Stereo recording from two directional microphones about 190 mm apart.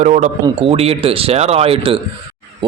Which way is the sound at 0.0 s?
40° right (ahead or behind).